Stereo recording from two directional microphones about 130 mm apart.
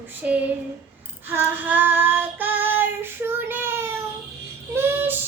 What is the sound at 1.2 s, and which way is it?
Child singing, 15° right (ahead or behind).